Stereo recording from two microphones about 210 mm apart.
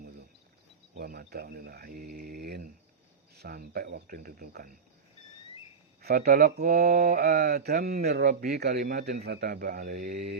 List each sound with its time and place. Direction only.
0.9 s speech: 45° right (ahead or behind)
6.0 s speech: 45° right (ahead or behind)